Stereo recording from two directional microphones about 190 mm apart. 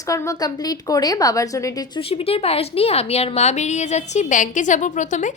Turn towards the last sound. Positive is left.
turn(degrees=40)  # may be behind; listen again after turning